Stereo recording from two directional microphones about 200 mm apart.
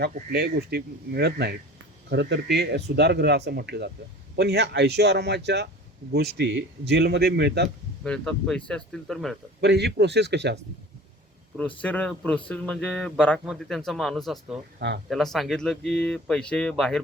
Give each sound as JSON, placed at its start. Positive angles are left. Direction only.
{"t": 0.1, "sound": "speech", "side_deg": -50}
{"t": 8.0, "sound": "a man's voice", "side_deg": 5}
{"t": 9.6, "sound": "speech", "side_deg": -55}
{"t": 11.8, "sound": "a man's voice", "side_deg": 5}
{"t": 14.8, "sound": "speech", "side_deg": -55}
{"t": 15.1, "sound": "a man's voice", "side_deg": 0}